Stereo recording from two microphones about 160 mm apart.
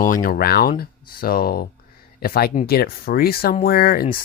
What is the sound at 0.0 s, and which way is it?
Speech, 60° left (ahead or behind).